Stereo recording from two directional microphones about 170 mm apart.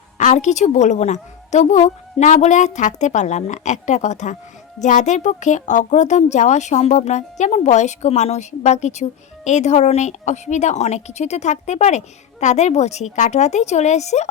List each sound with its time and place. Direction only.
0.2 s a woman's voice: 45° left (ahead or behind)